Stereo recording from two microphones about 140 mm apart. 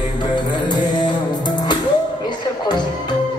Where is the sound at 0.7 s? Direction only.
30° left (ahead or behind).